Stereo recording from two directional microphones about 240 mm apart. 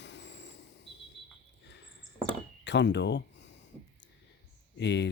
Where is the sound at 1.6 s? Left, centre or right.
Left.